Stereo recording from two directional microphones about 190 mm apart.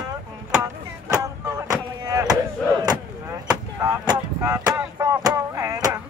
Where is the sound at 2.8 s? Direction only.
20° right (ahead or behind).